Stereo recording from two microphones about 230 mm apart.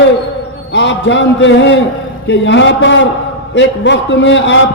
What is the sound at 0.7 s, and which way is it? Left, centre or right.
A man's voice, left.